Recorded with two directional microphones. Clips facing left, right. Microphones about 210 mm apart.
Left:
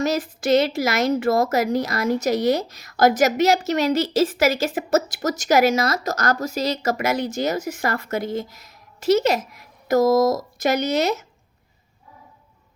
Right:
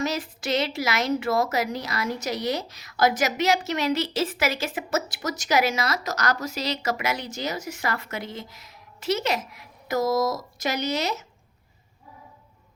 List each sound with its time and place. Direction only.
0.0 s a woman's voice: 45° left (ahead or behind)